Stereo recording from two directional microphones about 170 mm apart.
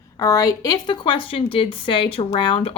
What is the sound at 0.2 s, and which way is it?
A woman's voice, 20° left (ahead or behind).